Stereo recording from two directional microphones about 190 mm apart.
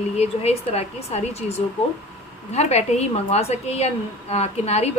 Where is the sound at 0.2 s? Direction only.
35° left (ahead or behind).